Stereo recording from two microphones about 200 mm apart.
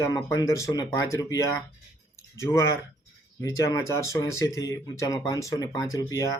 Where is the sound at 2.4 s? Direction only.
15° left (ahead or behind).